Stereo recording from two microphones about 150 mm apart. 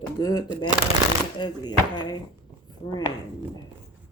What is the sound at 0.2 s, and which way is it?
Speech, 25° left (ahead or behind).